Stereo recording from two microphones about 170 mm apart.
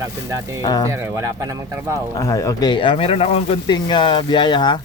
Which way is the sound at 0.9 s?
15° right (ahead or behind).